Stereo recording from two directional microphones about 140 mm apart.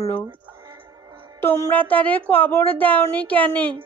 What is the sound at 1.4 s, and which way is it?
A woman's voice, 15° left (ahead or behind).